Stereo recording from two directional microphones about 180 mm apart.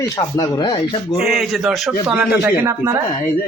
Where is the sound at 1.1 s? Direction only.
Centre (ahead or behind).